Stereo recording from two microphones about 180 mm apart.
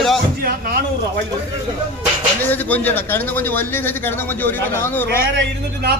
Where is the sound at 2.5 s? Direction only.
10° left (ahead or behind).